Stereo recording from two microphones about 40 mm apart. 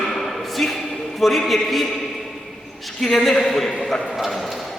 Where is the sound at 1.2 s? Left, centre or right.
Centre.